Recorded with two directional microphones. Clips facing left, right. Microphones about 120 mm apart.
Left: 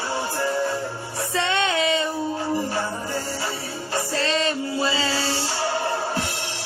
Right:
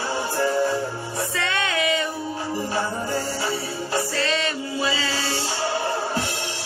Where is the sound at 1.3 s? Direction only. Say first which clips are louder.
Left 5 dB; 25° left (ahead or behind).